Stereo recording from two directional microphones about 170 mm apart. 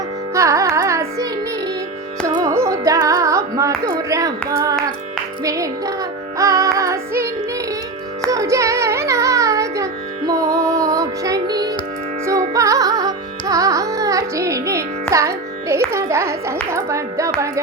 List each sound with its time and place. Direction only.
0.3 s carnatic music: 15° right (ahead or behind)
2.2 s music: 20° right (ahead or behind)
12.2 s carnatic music: 20° right (ahead or behind)
15.1 s music: 15° right (ahead or behind)